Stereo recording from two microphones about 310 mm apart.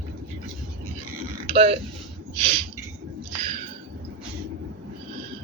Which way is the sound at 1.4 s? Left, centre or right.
Centre.